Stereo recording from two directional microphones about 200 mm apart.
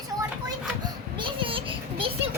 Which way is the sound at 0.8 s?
25° right (ahead or behind).